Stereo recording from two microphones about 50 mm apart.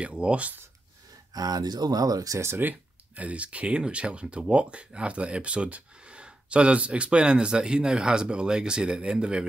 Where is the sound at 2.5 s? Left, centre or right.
Right.